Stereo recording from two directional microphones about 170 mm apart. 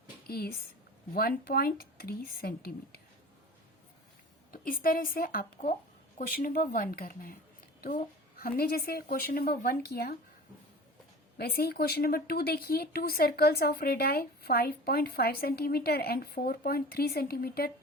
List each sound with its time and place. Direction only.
0.3 s a woman's voice: 65° left (ahead or behind)
4.5 s speech: 55° left (ahead or behind)
11.3 s speech: 65° left (ahead or behind)